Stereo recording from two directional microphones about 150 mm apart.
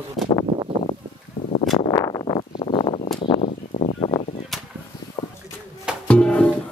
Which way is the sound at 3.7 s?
50° left (ahead or behind).